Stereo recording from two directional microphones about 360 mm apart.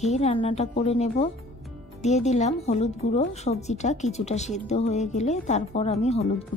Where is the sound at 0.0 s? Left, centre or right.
Centre.